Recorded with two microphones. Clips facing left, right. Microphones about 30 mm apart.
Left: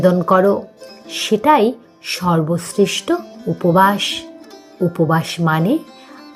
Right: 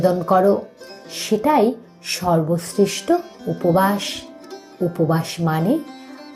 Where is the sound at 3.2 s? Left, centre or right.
Centre.